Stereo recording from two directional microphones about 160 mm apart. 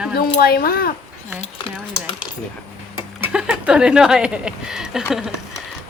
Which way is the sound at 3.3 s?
5° right (ahead or behind).